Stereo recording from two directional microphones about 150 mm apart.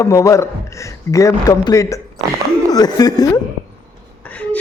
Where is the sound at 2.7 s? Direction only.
25° left (ahead or behind).